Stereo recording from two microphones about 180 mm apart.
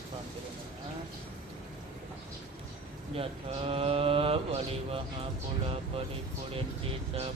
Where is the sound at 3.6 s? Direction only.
30° right (ahead or behind).